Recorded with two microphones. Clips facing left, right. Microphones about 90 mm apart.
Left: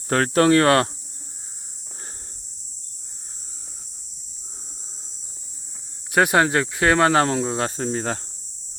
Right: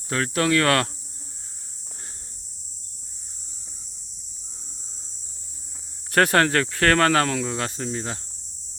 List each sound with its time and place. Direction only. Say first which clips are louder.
0.1 s speech: left 6 dB; 40° left (ahead or behind)
6.1 s speech: left 1 dB; 10° left (ahead or behind); by 8.2 s 40° left (ahead or behind)